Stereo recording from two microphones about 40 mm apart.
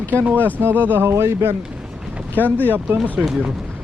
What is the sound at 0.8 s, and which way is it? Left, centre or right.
Speech, right.